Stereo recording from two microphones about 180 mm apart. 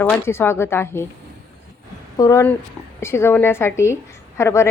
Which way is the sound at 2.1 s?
20° left (ahead or behind).